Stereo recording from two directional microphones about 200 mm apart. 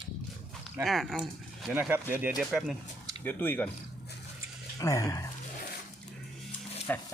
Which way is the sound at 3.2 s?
10° left (ahead or behind).